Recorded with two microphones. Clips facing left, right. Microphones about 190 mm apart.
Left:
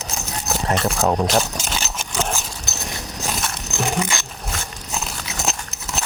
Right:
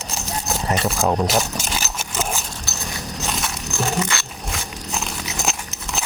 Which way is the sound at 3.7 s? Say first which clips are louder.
Even; 15° left (ahead or behind).